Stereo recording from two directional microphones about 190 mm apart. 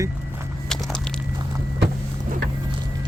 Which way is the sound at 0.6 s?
5° left (ahead or behind).